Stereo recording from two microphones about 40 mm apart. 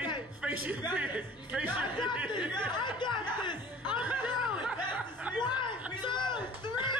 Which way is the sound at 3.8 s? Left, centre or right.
Right.